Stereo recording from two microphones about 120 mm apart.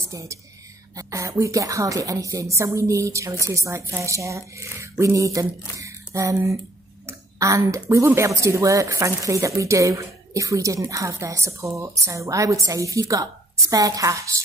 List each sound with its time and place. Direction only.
0.1 s speech: 25° right (ahead or behind)